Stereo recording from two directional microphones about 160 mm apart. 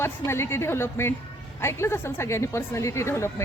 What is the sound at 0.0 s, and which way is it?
Speech, 15° left (ahead or behind).